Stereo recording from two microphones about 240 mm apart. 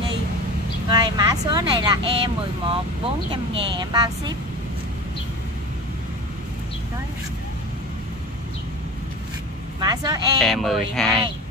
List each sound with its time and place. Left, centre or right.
0.8 s speech: centre
9.8 s speech: centre
10.4 s speech: centre